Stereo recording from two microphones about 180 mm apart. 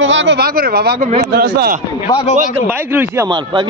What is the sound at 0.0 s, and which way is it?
Speech, 90° right.